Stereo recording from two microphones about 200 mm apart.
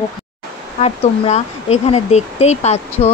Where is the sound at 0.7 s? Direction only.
30° left (ahead or behind).